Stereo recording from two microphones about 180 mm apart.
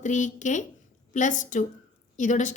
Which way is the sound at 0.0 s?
45° left (ahead or behind).